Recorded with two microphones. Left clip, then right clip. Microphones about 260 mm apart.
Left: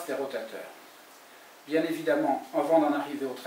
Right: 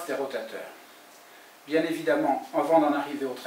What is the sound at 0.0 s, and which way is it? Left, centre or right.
Speech, centre.